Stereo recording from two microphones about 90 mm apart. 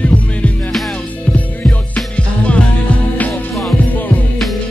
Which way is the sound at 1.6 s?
10° left (ahead or behind).